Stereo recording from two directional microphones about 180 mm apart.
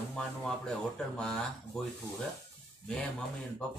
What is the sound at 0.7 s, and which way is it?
Speech, 5° left (ahead or behind).